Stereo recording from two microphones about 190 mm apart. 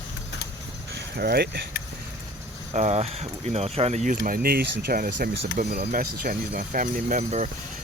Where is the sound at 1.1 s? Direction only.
55° right (ahead or behind).